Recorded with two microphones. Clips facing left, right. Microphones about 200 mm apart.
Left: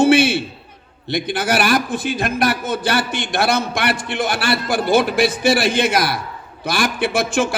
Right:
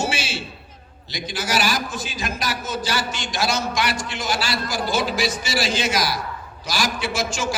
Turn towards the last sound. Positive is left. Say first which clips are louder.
# left 6 dB
turn(degrees=60)  # may be behind; listen again after turning